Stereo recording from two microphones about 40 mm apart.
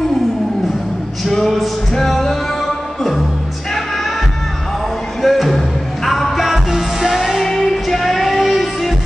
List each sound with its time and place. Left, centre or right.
1.2 s music: centre
5.2 s music: centre
6.4 s music: centre
7.4 s music: centre